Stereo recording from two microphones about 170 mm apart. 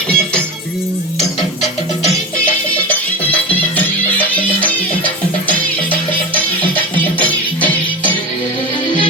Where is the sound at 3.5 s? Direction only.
10° left (ahead or behind).